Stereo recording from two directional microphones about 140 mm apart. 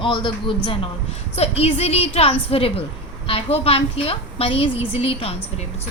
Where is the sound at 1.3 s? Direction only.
45° left (ahead or behind).